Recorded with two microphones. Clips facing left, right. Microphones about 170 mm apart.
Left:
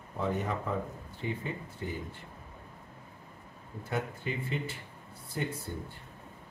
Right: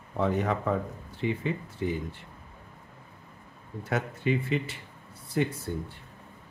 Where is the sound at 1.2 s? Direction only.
90° right.